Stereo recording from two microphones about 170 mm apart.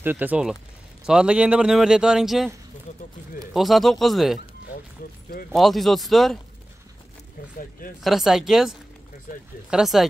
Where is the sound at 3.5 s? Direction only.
Centre (ahead or behind).